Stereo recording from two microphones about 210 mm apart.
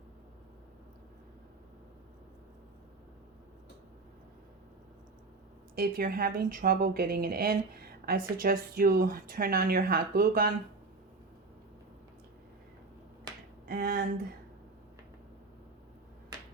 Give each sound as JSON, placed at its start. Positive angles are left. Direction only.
{"t": 5.7, "sound": "speech", "side_deg": -45}
{"t": 13.7, "sound": "speech", "side_deg": -45}